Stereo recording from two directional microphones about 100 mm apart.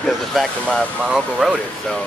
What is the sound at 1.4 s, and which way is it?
Speech, 5° right (ahead or behind).